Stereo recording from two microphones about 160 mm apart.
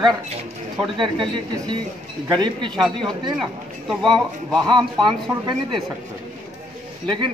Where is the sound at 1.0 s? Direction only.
30° right (ahead or behind).